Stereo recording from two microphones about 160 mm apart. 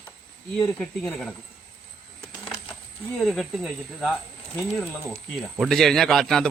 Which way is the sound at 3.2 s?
Centre (ahead or behind).